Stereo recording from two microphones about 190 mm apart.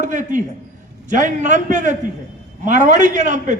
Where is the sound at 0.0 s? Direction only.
40° right (ahead or behind).